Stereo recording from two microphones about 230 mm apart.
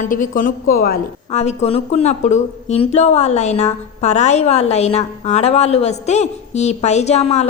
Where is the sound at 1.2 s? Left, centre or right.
Left.